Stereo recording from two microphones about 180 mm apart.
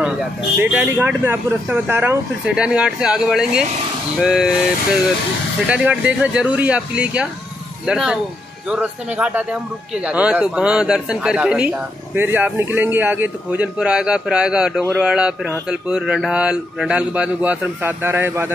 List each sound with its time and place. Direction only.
0.6 s a man's voice: 10° right (ahead or behind)
5.7 s a man's voice: 5° right (ahead or behind)